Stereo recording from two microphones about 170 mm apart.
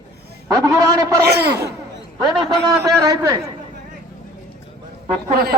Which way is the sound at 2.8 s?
20° right (ahead or behind).